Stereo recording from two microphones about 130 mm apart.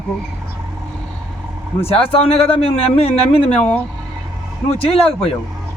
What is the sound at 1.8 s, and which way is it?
A man's voice, 50° left (ahead or behind).